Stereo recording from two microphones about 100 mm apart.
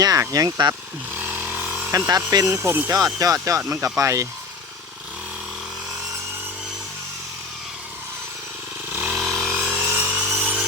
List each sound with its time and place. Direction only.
0.0 s chainsaw: 35° right (ahead or behind); by 1.9 s 20° right (ahead or behind)
2.0 s speech: 35° right (ahead or behind)
2.9 s speech: 35° right (ahead or behind)
3.7 s speech: 25° right (ahead or behind)
8.9 s motorcycle: 20° right (ahead or behind)
9.1 s chainsaw: 5° left (ahead or behind)
9.6 s sawing: 20° right (ahead or behind)